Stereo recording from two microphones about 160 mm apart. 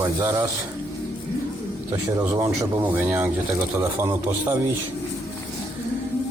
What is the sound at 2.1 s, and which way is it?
A man's voice, 20° right (ahead or behind).